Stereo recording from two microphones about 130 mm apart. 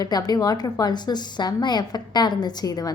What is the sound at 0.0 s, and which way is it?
A woman's voice, 30° left (ahead or behind).